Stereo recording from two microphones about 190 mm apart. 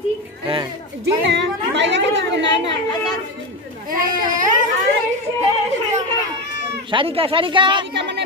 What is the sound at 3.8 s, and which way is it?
Speech, 45° right (ahead or behind).